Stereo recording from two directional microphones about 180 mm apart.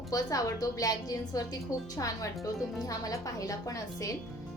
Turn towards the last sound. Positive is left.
turn(degrees=20)  # may be behind; listen again after turning